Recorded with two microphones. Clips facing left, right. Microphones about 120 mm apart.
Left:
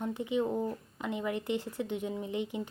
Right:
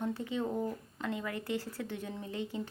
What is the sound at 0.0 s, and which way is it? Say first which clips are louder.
A woman's voice: left 3 dB; 15° left (ahead or behind).